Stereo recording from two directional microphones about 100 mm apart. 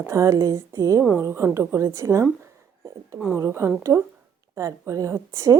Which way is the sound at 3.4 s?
25° right (ahead or behind).